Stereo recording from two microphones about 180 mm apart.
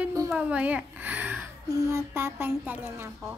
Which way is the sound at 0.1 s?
20° right (ahead or behind).